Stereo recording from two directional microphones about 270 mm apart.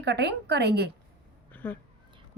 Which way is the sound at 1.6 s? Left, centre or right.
Centre.